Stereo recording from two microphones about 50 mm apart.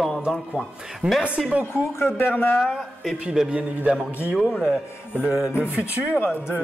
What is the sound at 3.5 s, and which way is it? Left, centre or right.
Speech, right.